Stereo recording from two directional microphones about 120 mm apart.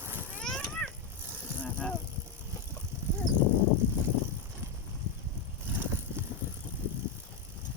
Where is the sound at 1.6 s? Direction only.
10° left (ahead or behind).